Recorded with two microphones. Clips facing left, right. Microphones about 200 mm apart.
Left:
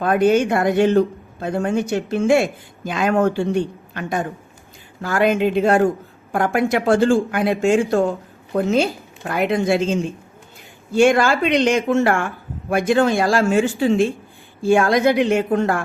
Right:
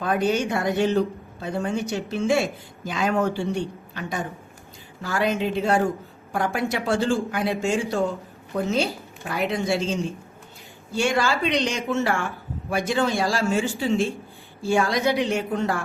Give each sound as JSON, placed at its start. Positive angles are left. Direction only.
{"t": 0.0, "sound": "speech", "side_deg": 55}